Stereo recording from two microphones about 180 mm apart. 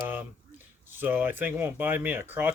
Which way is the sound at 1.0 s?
10° right (ahead or behind).